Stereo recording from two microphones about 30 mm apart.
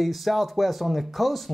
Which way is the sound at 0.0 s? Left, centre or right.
Centre.